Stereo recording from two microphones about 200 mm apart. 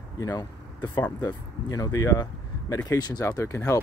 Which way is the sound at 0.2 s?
15° left (ahead or behind).